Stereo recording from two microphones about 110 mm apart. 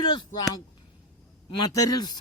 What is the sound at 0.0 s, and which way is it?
Speech, 40° left (ahead or behind).